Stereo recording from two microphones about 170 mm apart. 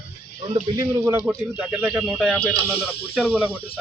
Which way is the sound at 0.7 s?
15° right (ahead or behind).